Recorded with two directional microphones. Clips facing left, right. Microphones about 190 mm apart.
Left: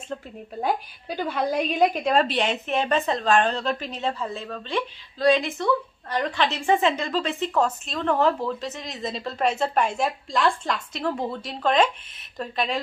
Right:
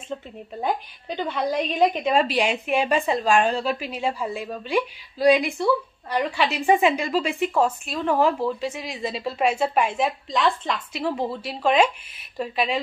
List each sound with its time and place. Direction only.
0.1 s a woman's voice: centre (ahead or behind)